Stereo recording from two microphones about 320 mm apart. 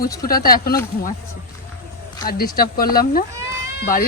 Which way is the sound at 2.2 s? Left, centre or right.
Left.